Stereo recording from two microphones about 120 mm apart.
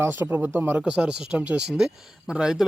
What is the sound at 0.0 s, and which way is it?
Speech, 20° right (ahead or behind).